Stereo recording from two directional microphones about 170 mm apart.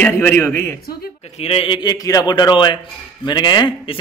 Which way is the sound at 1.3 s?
35° left (ahead or behind).